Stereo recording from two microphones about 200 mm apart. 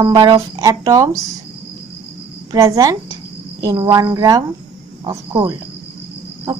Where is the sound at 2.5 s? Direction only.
15° right (ahead or behind).